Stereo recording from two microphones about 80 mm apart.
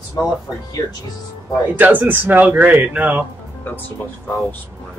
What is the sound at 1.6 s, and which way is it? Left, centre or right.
Speech, right.